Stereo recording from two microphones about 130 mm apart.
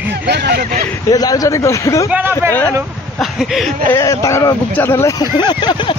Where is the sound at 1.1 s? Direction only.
25° left (ahead or behind).